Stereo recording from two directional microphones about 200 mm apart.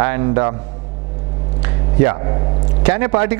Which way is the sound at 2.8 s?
10° right (ahead or behind).